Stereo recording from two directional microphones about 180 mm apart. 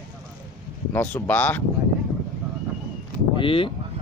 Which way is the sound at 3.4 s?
30° left (ahead or behind).